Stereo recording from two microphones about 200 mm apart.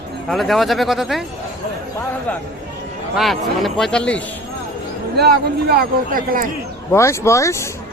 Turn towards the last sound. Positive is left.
turn(degrees=15)  # may be behind; listen again after turning